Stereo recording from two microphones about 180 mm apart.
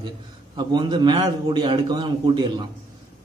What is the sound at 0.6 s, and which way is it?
A man's voice, 25° right (ahead or behind).